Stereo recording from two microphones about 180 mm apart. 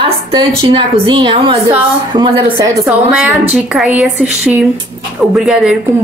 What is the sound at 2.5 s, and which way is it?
Speech, 20° right (ahead or behind).